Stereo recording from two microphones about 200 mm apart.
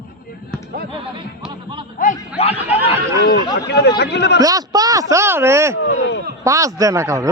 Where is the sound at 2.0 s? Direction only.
45° left (ahead or behind).